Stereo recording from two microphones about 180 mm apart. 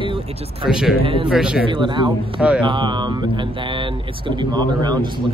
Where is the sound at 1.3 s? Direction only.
5° right (ahead or behind).